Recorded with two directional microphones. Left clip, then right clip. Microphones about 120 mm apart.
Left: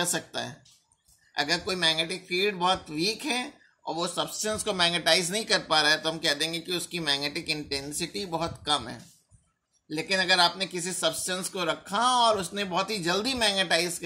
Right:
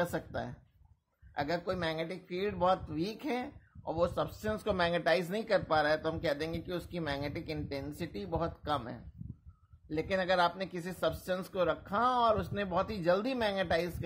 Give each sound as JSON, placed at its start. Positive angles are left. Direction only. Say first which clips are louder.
{"t": 0.0, "sound": "speech", "louder": "left 5 dB", "side_deg": -40}